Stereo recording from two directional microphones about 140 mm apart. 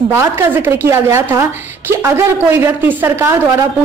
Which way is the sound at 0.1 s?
20° right (ahead or behind).